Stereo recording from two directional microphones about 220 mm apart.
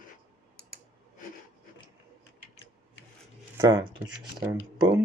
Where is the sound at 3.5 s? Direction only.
20° right (ahead or behind).